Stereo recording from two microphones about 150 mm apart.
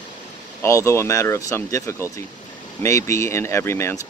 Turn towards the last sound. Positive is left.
turn(degrees=15)  # may be behind; listen again after turning